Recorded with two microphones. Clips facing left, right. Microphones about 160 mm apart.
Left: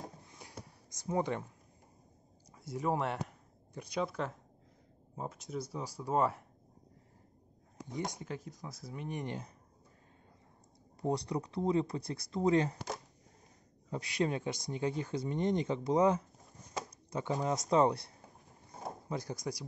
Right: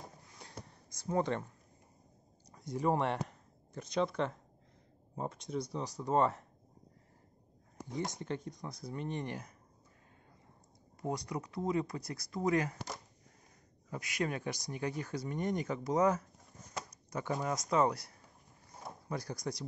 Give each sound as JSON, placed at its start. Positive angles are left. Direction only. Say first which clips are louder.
{"t": 0.4, "sound": "a sound", "louder": "right 1 dB", "side_deg": 10}
{"t": 2.5, "sound": "speech", "louder": "right 2 dB", "side_deg": 5}
{"t": 7.9, "sound": "speech", "louder": "right 1 dB", "side_deg": 15}
{"t": 9.2, "sound": "speech", "louder": "left 1 dB", "side_deg": 20}
{"t": 11.0, "sound": "speech", "louder": "left 4 dB", "side_deg": 30}
{"t": 13.8, "sound": "speech", "louder": "left 3 dB", "side_deg": 30}